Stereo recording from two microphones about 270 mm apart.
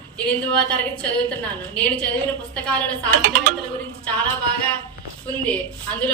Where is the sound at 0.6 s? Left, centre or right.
Centre.